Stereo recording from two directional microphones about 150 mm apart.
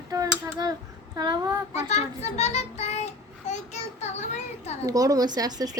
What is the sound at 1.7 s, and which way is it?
A child's voice, 45° left (ahead or behind).